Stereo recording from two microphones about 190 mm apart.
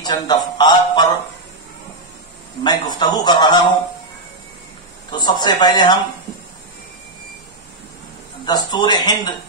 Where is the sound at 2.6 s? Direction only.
25° left (ahead or behind).